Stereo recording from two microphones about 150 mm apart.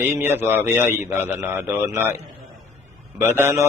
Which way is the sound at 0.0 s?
15° right (ahead or behind).